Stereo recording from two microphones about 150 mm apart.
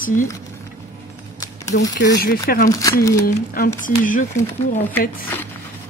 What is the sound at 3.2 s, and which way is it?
Speech, 75° left (ahead or behind).